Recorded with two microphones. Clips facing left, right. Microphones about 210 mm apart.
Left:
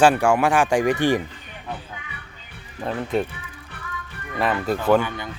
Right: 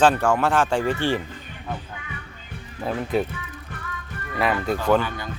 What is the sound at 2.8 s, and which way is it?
Speech, centre (ahead or behind).